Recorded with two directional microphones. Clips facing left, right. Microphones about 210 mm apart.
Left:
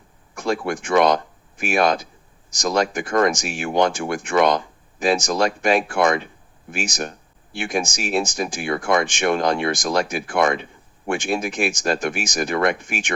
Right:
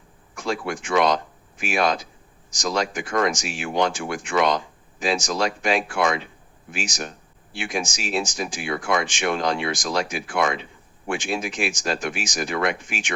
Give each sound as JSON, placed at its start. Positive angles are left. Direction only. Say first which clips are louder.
{"t": 0.3, "sound": "speech", "louder": "left 4 dB", "side_deg": 55}